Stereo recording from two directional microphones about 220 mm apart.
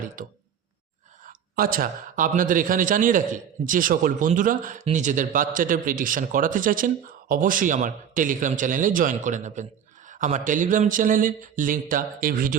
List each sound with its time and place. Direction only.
1.3 s a man's voice: 40° right (ahead or behind)